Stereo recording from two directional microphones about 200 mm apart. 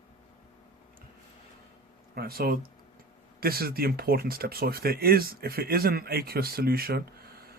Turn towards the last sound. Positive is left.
turn(degrees=-50)  # may be behind; listen again after turning